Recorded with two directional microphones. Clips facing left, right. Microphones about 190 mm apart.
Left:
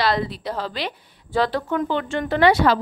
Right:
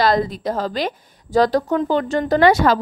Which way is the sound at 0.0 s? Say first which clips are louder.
Right 5 dB; 45° right (ahead or behind).